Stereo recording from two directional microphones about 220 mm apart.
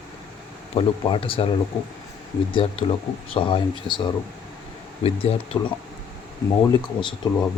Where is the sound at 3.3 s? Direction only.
20° left (ahead or behind).